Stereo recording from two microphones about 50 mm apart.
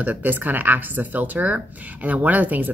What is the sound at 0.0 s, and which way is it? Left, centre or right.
Speech, right.